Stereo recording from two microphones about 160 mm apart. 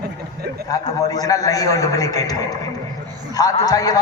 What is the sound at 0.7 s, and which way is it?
A man's voice, 25° left (ahead or behind).